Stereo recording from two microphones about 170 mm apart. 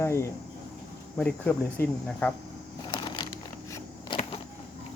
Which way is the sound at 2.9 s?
30° left (ahead or behind).